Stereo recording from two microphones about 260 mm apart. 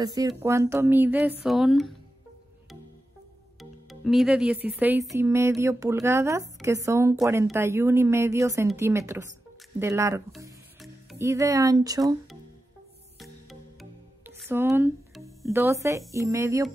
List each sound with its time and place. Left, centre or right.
0.0 s speech: centre
3.5 s speech: centre
10.8 s music: centre
11.2 s speech: centre
13.2 s music: centre
16.1 s speech: centre